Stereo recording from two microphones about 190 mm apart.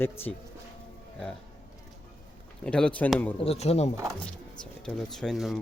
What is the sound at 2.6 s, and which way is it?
Speech, 5° left (ahead or behind).